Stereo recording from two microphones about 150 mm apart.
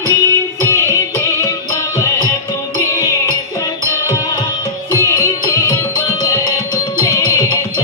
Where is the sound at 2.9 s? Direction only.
20° left (ahead or behind).